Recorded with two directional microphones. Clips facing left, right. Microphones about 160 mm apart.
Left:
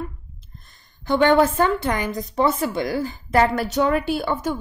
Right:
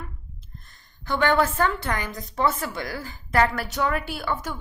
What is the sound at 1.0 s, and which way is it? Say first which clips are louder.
A woman's voice: left 5 dB; 20° left (ahead or behind).